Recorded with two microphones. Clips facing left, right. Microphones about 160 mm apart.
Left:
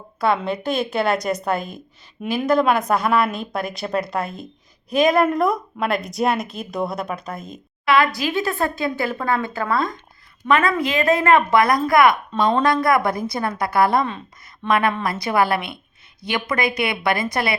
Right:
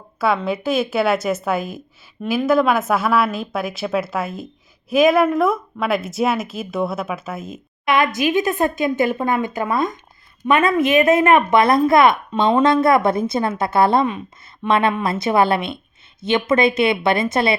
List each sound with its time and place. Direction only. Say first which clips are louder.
0.2 s a woman's voice: right 1 dB; 5° right (ahead or behind)
7.9 s a woman's voice: right 1 dB; 20° right (ahead or behind)
12.3 s a woman's voice: right 1 dB; 10° right (ahead or behind)
12.6 s a woman's voice: right 3 dB; 25° right (ahead or behind)